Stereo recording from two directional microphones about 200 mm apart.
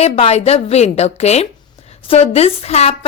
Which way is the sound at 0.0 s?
30° left (ahead or behind).